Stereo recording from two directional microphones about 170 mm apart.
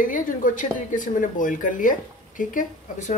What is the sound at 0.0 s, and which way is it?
Speech, 50° left (ahead or behind).